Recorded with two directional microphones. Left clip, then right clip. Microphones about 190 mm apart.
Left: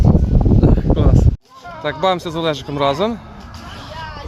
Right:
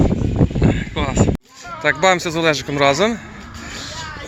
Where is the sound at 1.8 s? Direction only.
5° right (ahead or behind).